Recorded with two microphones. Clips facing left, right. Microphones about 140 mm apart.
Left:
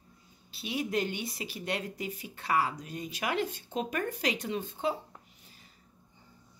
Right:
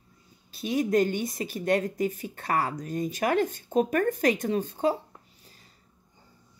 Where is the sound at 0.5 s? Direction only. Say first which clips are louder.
Right 8 dB; 45° right (ahead or behind).